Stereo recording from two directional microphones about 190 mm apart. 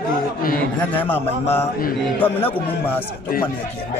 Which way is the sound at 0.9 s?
10° left (ahead or behind).